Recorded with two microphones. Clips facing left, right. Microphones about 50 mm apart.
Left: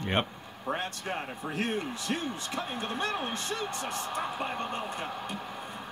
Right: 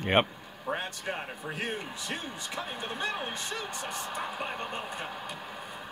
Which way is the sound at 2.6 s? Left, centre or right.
Left.